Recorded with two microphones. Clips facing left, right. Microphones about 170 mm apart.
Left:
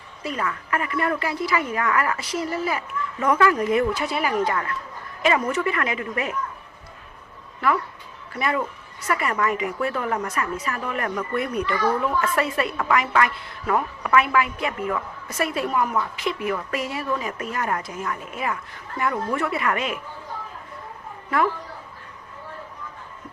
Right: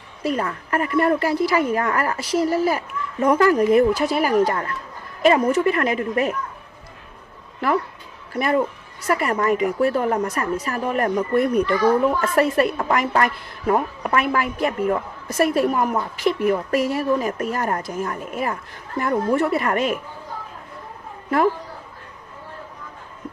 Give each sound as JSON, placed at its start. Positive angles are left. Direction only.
{"t": 0.2, "sound": "a woman's voice", "side_deg": -40}
{"t": 8.3, "sound": "a woman's voice", "side_deg": -40}